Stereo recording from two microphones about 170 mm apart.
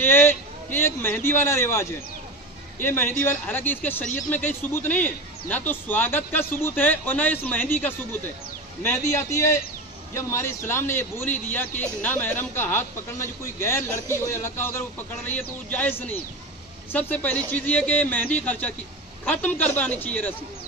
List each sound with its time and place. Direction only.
0.0 s a man's voice: 15° left (ahead or behind)